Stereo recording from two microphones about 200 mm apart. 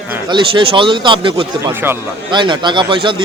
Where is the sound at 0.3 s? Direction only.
25° right (ahead or behind).